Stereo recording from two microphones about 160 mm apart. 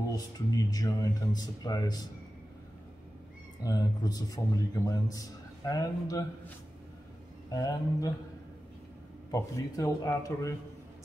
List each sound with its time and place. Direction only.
0.1 s a man's voice: 25° left (ahead or behind)
3.6 s a man's voice: 25° left (ahead or behind)
7.5 s a man's voice: 25° left (ahead or behind)
9.3 s a man's voice: 20° left (ahead or behind)